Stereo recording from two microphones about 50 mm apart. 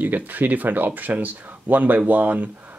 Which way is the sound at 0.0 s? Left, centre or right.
Right.